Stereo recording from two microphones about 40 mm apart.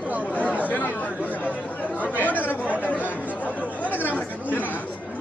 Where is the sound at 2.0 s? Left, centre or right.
Left.